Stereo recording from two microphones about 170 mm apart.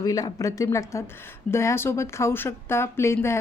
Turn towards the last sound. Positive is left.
turn(degrees=15)  # may be behind; listen again after turning